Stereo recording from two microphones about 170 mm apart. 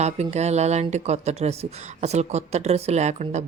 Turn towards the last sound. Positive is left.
turn(degrees=-40)  # may be behind; listen again after turning